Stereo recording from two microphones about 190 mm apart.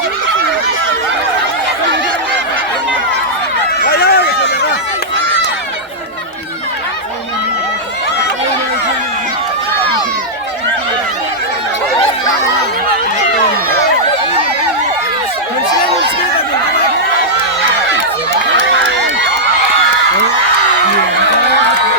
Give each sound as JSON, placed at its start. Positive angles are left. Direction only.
{"t": 3.8, "sound": "run", "side_deg": 55}